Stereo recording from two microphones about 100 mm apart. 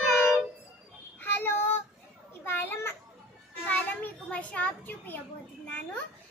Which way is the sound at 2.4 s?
20° left (ahead or behind).